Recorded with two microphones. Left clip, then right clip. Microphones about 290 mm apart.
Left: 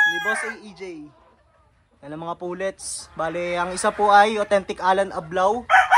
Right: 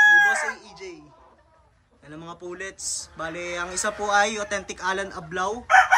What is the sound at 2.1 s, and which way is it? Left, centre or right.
Speech, centre.